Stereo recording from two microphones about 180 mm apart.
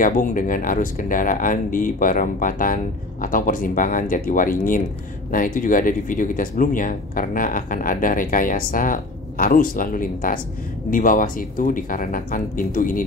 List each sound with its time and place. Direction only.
0.0 s speech: 45° left (ahead or behind)